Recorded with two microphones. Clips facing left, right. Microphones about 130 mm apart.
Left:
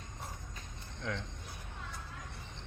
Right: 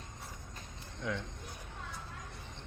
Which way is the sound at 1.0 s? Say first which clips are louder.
Right 2 dB; 10° right (ahead or behind).